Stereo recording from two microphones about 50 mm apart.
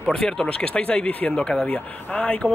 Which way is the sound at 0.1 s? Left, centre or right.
Centre.